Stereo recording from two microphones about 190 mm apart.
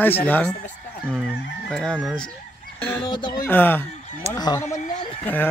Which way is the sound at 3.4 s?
10° left (ahead or behind).